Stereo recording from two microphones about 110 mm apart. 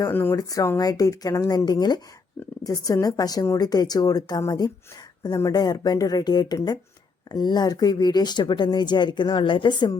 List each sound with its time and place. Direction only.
0.1 s speech: 20° left (ahead or behind)
0.3 s speech: 30° left (ahead or behind)